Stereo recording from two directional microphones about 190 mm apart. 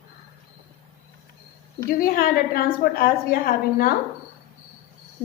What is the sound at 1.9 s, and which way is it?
A woman's voice, 50° left (ahead or behind).